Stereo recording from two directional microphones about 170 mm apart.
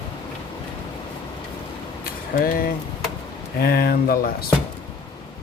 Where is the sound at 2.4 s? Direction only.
55° left (ahead or behind).